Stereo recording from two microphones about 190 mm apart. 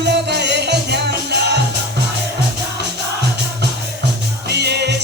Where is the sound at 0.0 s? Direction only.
60° right (ahead or behind).